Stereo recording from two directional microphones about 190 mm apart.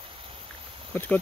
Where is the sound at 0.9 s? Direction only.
10° left (ahead or behind).